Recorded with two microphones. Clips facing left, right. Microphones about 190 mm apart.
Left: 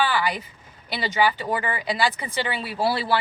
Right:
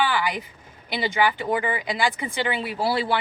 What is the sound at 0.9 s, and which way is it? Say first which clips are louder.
Speech: even; 15° right (ahead or behind).